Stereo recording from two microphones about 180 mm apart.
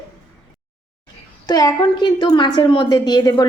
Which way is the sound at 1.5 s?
20° left (ahead or behind).